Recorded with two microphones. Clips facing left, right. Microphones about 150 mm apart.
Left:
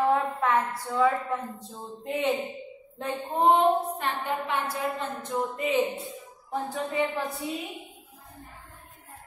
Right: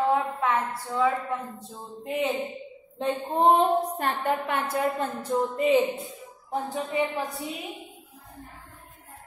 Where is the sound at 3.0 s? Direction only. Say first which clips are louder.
Right 2 dB; 30° right (ahead or behind).